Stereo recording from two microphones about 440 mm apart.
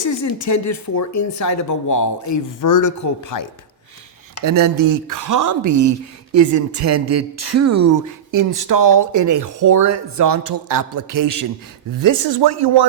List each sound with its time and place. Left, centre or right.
0.0 s a woman's voice: left
4.4 s speech: right